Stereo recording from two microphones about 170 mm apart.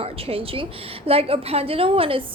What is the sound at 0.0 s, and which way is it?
A woman's voice, 35° right (ahead or behind).